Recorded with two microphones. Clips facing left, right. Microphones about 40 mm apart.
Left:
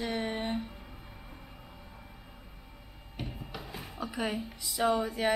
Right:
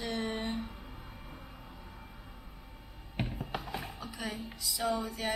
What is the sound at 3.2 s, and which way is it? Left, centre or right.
Music, right.